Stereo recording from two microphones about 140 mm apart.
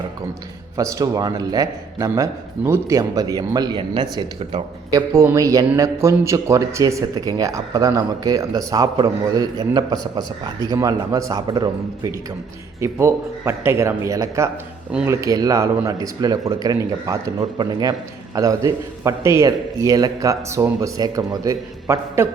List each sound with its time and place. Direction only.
0.8 s speech: 20° right (ahead or behind)